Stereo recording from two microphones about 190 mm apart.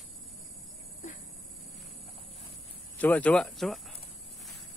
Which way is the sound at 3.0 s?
10° left (ahead or behind).